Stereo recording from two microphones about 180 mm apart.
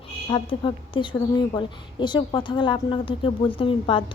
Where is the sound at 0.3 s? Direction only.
30° left (ahead or behind).